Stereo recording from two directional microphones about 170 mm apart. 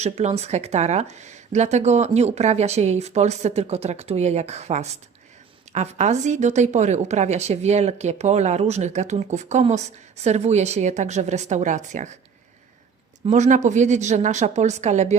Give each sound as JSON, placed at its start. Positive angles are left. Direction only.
{"t": 0.0, "sound": "a woman's voice", "side_deg": -40}
{"t": 13.2, "sound": "a woman's voice", "side_deg": -45}